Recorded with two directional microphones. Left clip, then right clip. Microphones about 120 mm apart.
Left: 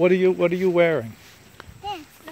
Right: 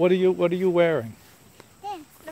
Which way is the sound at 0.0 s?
10° right (ahead or behind).